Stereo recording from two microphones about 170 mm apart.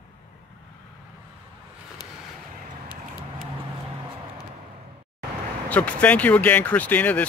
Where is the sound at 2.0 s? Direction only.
25° left (ahead or behind).